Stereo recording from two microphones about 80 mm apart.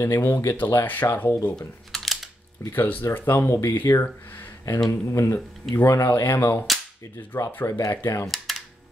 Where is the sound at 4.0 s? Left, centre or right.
Left.